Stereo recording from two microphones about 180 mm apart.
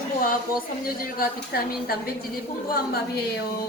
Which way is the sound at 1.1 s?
55° left (ahead or behind).